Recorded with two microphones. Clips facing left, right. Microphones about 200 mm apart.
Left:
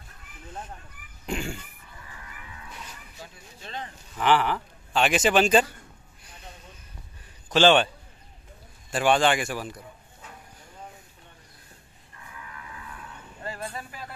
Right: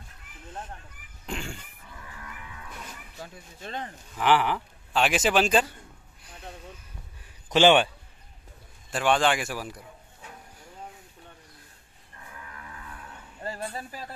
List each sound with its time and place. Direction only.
1.2 s a sound: 5° left (ahead or behind)
3.2 s speech: 50° right (ahead or behind)
4.2 s speech: 10° right (ahead or behind)
7.4 s a man's voice: 15° right (ahead or behind)
8.9 s speech: 5° left (ahead or behind)